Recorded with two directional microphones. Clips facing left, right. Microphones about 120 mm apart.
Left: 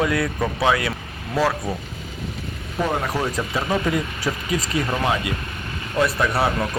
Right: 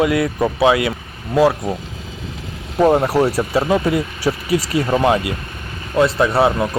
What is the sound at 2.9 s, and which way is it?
Speech, 30° right (ahead or behind).